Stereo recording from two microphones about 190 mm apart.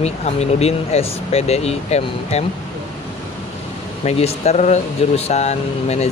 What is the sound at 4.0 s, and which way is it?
Speech, 35° left (ahead or behind).